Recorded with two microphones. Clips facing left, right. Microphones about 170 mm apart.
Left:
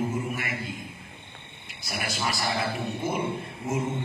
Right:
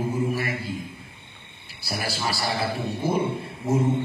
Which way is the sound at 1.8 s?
30° right (ahead or behind).